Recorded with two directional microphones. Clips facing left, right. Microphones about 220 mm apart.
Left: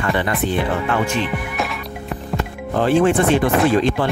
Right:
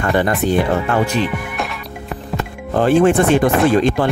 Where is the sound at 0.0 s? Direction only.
45° right (ahead or behind).